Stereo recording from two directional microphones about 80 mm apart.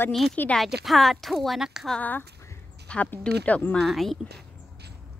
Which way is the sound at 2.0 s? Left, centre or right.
Left.